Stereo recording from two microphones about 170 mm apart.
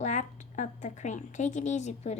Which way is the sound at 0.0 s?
45° left (ahead or behind).